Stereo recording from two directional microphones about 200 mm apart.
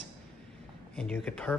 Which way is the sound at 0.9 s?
5° left (ahead or behind).